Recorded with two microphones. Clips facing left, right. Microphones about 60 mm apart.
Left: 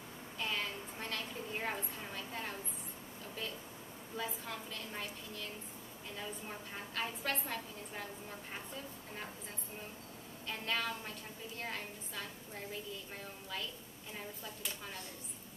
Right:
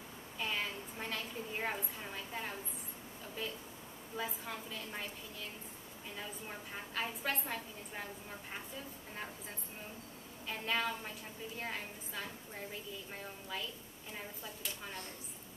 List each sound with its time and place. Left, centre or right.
0.4 s a sound: centre
4.2 s a woman's voice: centre
6.7 s a woman's voice: centre
10.5 s a woman's voice: centre